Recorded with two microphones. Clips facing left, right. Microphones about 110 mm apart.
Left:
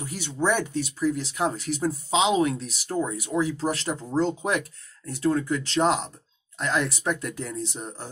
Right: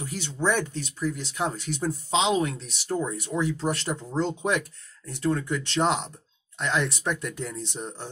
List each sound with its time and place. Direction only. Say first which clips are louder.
0.0 s speech: left 1 dB; 10° left (ahead or behind)